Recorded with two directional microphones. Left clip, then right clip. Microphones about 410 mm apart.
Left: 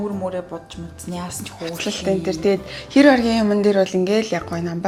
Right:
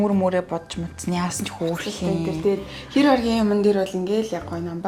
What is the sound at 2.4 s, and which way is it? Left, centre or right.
Speech, centre.